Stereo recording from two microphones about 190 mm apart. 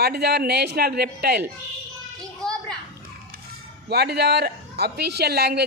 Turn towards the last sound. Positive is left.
turn(degrees=-60)  # may be behind; listen again after turning